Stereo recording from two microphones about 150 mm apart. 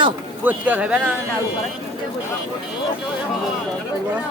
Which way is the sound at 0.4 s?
10° right (ahead or behind).